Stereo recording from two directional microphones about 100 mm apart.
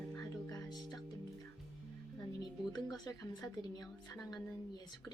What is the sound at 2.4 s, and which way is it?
Speech, 40° left (ahead or behind).